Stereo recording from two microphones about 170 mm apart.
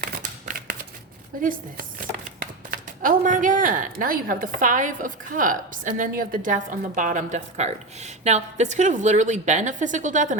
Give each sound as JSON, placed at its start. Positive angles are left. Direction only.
{"t": 0.1, "sound": "crumpling", "side_deg": -55}
{"t": 1.3, "sound": "speech", "side_deg": -55}